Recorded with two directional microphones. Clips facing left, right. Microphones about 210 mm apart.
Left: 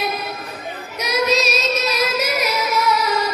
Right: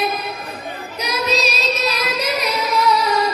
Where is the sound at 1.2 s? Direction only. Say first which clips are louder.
Even; 35° right (ahead or behind).